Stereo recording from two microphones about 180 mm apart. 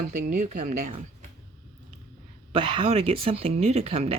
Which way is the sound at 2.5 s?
30° right (ahead or behind).